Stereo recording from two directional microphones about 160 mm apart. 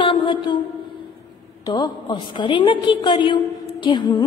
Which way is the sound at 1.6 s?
25° left (ahead or behind).